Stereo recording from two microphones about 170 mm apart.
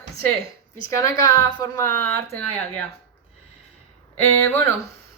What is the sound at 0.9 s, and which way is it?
A woman's voice, 20° left (ahead or behind).